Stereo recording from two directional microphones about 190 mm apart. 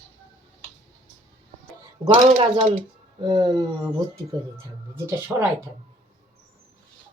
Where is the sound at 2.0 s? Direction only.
25° right (ahead or behind).